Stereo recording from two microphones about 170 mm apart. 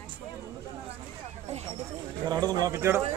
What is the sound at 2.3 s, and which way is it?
Speech, 20° right (ahead or behind).